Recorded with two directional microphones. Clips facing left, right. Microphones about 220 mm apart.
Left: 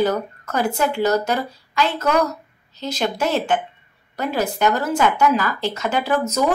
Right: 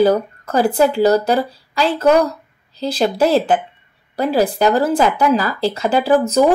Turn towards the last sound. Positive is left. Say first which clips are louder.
# right 6 dB
turn(degrees=-30)  # may be behind; listen again after turning